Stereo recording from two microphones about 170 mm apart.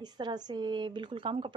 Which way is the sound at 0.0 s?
25° right (ahead or behind).